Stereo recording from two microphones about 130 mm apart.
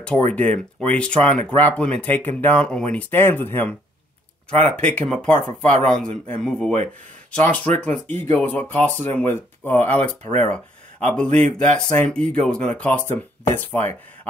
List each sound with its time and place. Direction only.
0.0 s speech: 10° left (ahead or behind)